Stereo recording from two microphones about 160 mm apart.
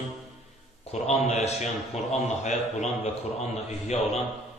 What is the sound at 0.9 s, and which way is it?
A man's voice, 45° left (ahead or behind).